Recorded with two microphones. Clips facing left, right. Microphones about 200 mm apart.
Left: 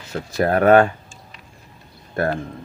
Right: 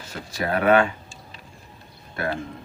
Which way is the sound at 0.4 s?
45° left (ahead or behind).